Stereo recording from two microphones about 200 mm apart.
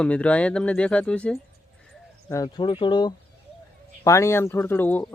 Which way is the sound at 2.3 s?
15° left (ahead or behind).